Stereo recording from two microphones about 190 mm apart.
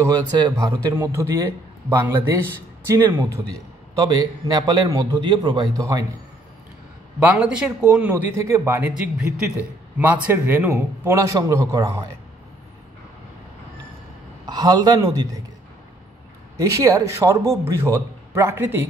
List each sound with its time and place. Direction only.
0.0 s a man's voice: 20° right (ahead or behind)
7.2 s a man's voice: 5° right (ahead or behind)
14.4 s a man's voice: 20° right (ahead or behind)
16.5 s a man's voice: 15° right (ahead or behind)